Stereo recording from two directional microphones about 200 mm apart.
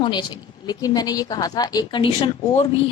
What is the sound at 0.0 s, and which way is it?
A woman's voice, 20° left (ahead or behind).